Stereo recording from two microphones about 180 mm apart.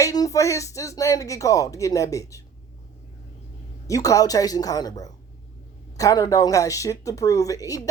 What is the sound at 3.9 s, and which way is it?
A woman's voice, 20° left (ahead or behind).